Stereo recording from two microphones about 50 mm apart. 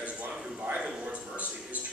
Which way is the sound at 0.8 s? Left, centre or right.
Centre.